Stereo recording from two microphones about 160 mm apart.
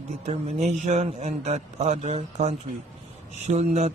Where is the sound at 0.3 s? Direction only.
45° right (ahead or behind).